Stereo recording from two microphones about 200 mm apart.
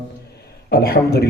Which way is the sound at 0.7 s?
55° left (ahead or behind).